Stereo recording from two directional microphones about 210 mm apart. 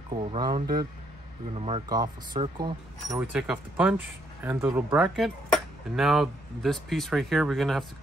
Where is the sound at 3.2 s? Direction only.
5° right (ahead or behind).